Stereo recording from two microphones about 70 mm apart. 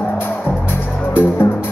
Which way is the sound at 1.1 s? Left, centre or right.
Left.